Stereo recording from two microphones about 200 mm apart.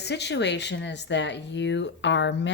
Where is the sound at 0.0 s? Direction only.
55° left (ahead or behind).